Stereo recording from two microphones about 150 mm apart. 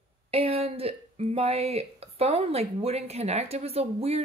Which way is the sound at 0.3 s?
40° right (ahead or behind).